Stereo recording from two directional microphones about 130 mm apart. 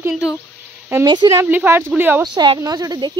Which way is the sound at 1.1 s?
35° right (ahead or behind).